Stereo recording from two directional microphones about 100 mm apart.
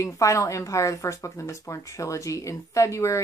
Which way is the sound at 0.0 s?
30° left (ahead or behind).